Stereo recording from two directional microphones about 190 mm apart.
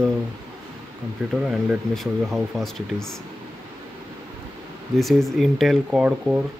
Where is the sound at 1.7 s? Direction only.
Centre (ahead or behind).